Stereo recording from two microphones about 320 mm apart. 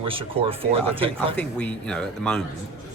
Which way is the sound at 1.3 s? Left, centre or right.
Centre.